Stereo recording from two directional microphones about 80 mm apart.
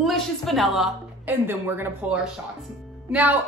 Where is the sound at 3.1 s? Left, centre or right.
Centre.